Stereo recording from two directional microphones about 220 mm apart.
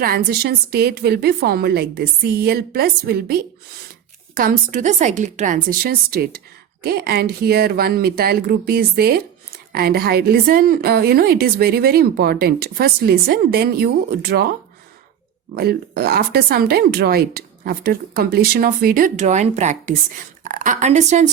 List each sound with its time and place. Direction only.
0.0 s a woman's voice: 45° right (ahead or behind)
15.5 s a woman's voice: 45° right (ahead or behind)